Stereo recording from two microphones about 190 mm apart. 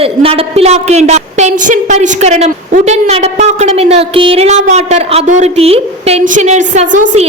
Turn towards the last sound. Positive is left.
turn(degrees=-40)  # may be behind; listen again after turning